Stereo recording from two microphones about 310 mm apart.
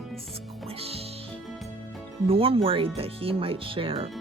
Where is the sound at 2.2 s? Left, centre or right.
Centre.